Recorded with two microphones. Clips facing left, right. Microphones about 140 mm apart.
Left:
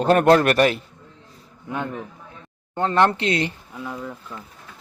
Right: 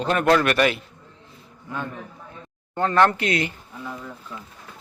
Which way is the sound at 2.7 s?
20° left (ahead or behind).